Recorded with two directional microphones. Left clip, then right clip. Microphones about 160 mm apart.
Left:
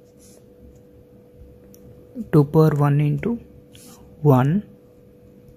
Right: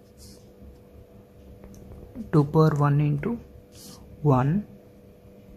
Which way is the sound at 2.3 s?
30° left (ahead or behind).